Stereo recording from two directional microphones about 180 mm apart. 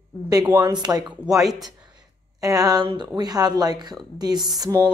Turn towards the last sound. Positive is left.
turn(degrees=-20)  # may be behind; listen again after turning